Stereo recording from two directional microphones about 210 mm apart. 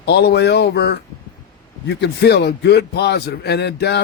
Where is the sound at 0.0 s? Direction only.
50° left (ahead or behind).